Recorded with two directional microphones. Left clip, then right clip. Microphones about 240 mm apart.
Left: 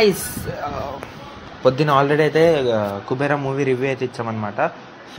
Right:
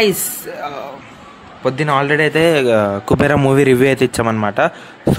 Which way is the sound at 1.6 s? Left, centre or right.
Centre.